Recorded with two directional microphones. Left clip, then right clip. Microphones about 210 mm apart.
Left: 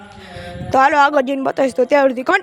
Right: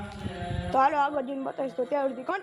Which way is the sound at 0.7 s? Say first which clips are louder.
Left 12 dB; 30° left (ahead or behind).